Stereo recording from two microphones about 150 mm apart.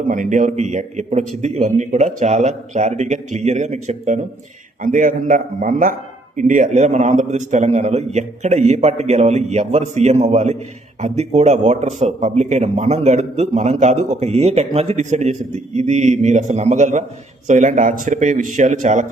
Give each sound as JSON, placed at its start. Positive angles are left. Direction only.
{"t": 0.1, "sound": "a man's voice", "side_deg": -60}